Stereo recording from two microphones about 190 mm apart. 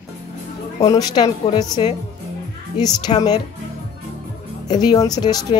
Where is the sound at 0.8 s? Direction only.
20° left (ahead or behind).